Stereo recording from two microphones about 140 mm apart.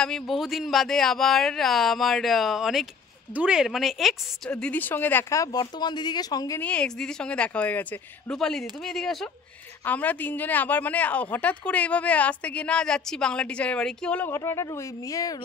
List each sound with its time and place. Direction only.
0.0 s speech: centre (ahead or behind)
4.5 s speech: 10° left (ahead or behind); by 6.6 s 25° left (ahead or behind)
6.6 s a woman's voice: 5° left (ahead or behind); by 15.3 s 25° left (ahead or behind)